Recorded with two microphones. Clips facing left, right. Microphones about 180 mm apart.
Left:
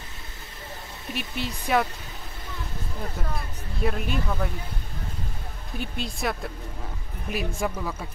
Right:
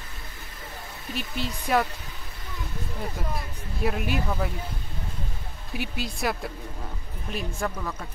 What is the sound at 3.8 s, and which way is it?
Speech, 5° right (ahead or behind).